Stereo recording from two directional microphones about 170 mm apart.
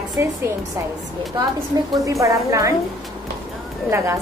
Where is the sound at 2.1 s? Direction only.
20° right (ahead or behind).